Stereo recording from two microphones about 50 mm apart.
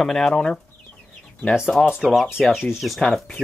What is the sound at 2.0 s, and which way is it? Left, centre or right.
Speech, centre.